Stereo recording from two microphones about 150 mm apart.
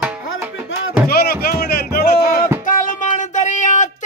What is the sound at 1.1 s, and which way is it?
Music, 90° left.